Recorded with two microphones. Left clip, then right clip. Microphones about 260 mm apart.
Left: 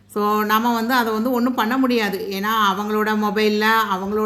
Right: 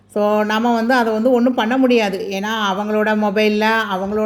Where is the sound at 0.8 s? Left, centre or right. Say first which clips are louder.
Right 3 dB; centre.